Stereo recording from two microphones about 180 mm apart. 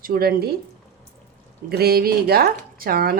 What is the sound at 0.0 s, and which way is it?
Speech, 55° right (ahead or behind).